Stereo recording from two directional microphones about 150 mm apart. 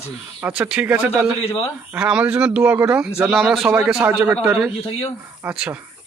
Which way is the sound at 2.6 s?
20° right (ahead or behind).